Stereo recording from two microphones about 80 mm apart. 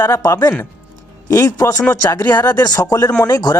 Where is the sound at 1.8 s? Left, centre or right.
Left.